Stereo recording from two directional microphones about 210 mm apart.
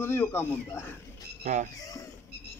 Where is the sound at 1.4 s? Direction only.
35° right (ahead or behind).